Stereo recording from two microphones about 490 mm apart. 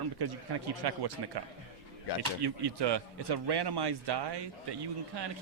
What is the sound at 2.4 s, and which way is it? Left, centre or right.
A man's voice, right.